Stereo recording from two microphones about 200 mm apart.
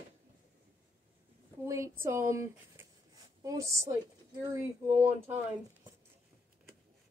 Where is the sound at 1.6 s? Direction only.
15° right (ahead or behind).